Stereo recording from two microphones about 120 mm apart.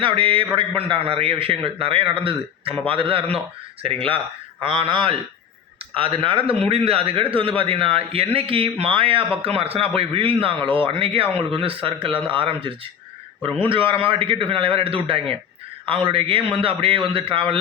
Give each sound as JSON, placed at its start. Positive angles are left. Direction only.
{"t": 0.0, "sound": "a man's voice", "side_deg": -50}